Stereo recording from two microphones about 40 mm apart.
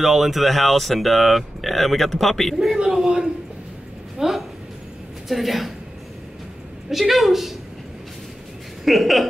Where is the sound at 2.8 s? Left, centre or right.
Centre.